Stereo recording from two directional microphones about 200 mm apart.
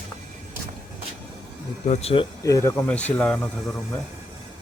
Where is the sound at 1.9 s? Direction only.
30° left (ahead or behind); by 4.0 s 10° left (ahead or behind).